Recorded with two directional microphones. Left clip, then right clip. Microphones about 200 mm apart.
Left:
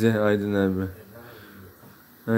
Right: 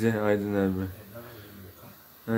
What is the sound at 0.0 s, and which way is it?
Mantra, 15° left (ahead or behind).